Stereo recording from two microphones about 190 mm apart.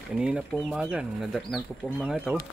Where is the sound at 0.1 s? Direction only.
5° right (ahead or behind).